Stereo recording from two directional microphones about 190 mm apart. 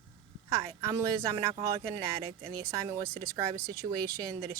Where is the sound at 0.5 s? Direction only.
15° right (ahead or behind).